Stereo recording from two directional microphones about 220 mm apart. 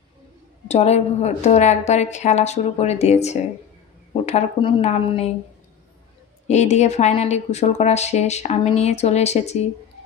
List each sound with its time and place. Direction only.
0.7 s a woman's voice: 30° left (ahead or behind)
6.4 s a woman's voice: 30° left (ahead or behind)